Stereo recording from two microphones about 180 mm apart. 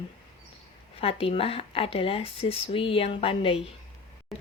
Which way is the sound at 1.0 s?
30° left (ahead or behind).